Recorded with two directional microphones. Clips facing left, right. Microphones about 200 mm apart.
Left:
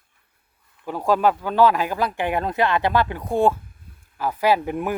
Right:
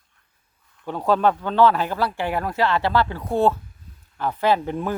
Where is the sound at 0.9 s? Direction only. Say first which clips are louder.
Even; 10° left (ahead or behind).